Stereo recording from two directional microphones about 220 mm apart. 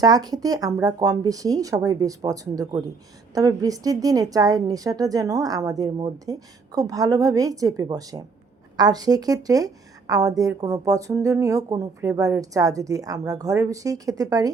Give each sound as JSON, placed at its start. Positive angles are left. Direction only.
{"t": 0.0, "sound": "a woman's voice", "side_deg": -20}